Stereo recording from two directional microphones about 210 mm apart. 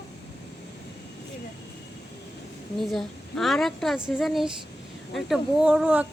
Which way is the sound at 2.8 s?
Centre (ahead or behind).